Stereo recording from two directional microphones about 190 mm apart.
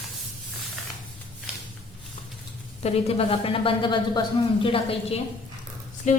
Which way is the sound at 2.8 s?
35° left (ahead or behind).